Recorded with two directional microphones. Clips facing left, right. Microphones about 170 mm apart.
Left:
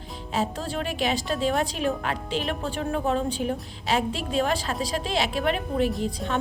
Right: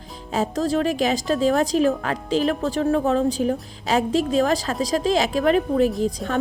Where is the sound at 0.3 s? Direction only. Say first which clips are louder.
Right 7 dB; 40° right (ahead or behind).